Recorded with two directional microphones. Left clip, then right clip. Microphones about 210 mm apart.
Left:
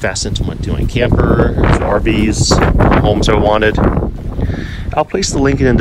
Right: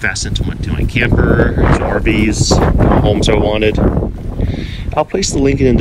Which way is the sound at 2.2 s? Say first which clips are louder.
Left 1 dB; 15° left (ahead or behind).